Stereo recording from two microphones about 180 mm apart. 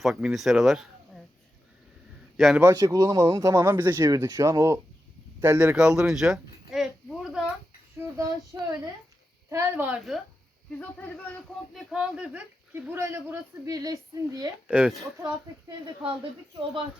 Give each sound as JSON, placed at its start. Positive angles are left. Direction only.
{"t": 0.0, "sound": "speech", "side_deg": 0}
{"t": 2.4, "sound": "speech", "side_deg": 0}
{"t": 2.6, "sound": "a child's voice", "side_deg": -20}
{"t": 7.9, "sound": "child singing", "side_deg": -15}
{"t": 8.5, "sound": "speech", "side_deg": -15}
{"t": 10.8, "sound": "speech", "side_deg": 10}
{"t": 14.7, "sound": "speech", "side_deg": -5}